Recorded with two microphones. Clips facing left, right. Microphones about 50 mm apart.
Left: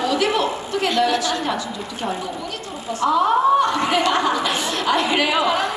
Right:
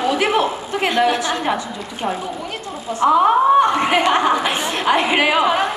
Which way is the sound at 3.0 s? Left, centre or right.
Right.